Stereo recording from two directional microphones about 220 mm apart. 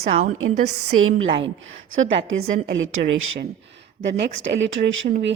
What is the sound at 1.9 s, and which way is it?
A woman's voice, 55° right (ahead or behind).